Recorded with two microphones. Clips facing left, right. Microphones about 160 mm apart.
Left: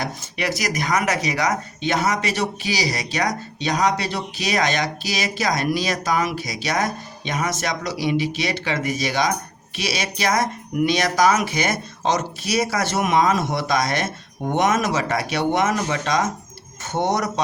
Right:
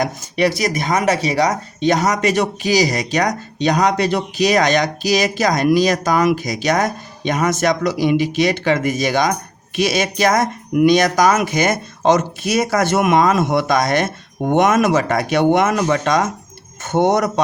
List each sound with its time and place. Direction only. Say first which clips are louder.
0.0 s speech: right 8 dB; 35° right (ahead or behind); by 17.4 s 55° right (ahead or behind)